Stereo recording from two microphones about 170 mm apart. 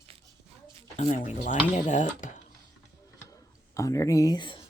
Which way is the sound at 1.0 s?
45° left (ahead or behind).